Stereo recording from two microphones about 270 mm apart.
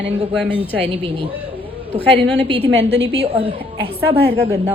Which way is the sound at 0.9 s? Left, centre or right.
Centre.